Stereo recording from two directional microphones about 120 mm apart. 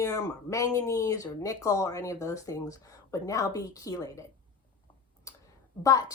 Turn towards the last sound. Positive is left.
turn(degrees=30)  # may be behind; listen again after turning